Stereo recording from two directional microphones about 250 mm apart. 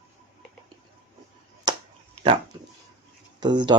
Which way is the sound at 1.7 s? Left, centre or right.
Centre.